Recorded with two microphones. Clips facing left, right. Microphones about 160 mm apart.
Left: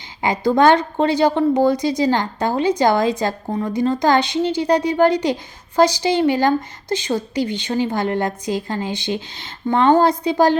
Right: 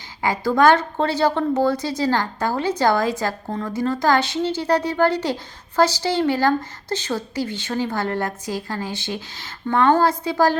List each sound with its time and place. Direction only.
0.2 s a woman's voice: 20° left (ahead or behind)